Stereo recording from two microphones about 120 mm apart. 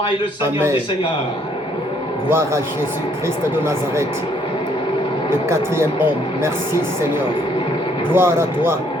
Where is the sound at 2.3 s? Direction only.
20° right (ahead or behind).